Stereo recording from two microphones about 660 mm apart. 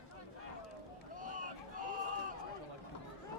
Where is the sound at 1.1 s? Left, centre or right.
Centre.